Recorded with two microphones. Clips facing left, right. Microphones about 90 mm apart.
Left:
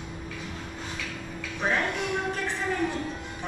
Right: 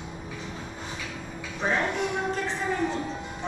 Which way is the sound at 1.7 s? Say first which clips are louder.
Right 1 dB; 10° right (ahead or behind).